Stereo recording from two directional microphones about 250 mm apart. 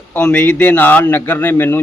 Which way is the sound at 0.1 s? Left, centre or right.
Centre.